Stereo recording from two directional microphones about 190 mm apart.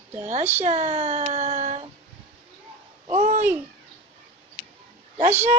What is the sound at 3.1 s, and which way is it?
Babbling, 40° right (ahead or behind).